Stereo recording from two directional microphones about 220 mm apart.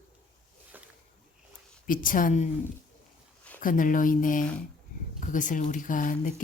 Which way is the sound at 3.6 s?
40° left (ahead or behind).